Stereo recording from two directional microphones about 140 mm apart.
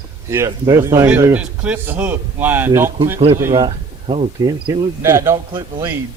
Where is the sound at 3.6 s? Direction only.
45° right (ahead or behind).